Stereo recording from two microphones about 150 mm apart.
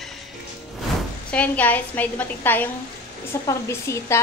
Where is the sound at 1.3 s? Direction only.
10° left (ahead or behind).